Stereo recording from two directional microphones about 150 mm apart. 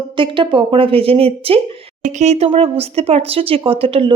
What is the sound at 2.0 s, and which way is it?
Speech, 50° right (ahead or behind).